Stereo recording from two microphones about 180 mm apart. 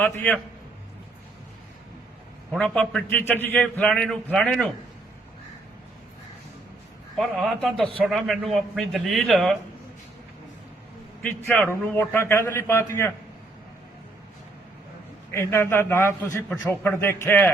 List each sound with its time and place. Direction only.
0.0 s a man's voice: 10° left (ahead or behind)
2.5 s a man's voice: 5° left (ahead or behind)
7.2 s a man's voice: centre (ahead or behind)
11.2 s a man's voice: 10° left (ahead or behind)
15.3 s a man's voice: 15° left (ahead or behind)